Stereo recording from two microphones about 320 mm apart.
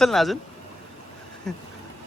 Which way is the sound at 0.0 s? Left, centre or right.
Centre.